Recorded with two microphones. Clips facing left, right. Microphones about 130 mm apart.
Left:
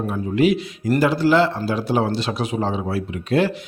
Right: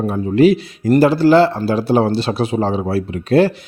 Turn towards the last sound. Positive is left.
turn(degrees=-35)  # may be behind; listen again after turning